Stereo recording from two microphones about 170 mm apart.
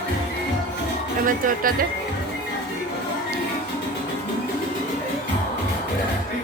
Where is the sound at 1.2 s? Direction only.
55° right (ahead or behind).